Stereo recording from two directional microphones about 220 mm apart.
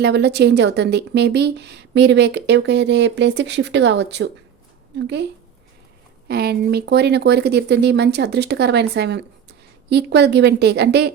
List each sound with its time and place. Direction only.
0.0 s speech: 50° right (ahead or behind)